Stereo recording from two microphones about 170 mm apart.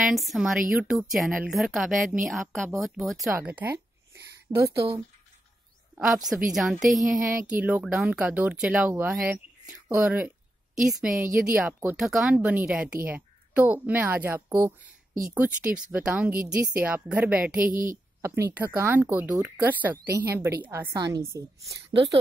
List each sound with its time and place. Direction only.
0.0 s a woman's voice: centre (ahead or behind)
3.3 s a sound: 10° right (ahead or behind)
5.9 s a woman's voice: 5° right (ahead or behind)
17.6 s a woman's voice: 55° right (ahead or behind)
18.2 s a woman's voice: 15° right (ahead or behind)